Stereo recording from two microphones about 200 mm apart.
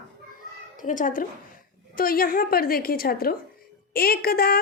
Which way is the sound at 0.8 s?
40° left (ahead or behind).